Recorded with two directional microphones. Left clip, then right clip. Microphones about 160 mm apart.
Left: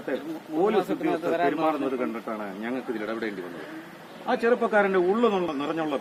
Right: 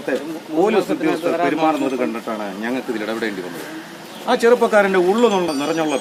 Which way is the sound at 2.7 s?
20° right (ahead or behind).